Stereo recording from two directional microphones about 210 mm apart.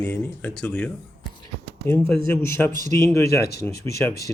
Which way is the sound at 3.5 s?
50° left (ahead or behind).